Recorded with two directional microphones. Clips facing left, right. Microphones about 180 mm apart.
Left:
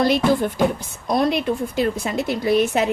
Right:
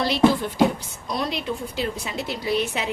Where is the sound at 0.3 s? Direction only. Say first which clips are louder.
Left 1 dB; 50° left (ahead or behind).